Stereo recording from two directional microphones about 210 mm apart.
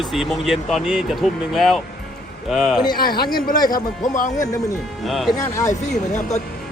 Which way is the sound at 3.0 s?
45° left (ahead or behind).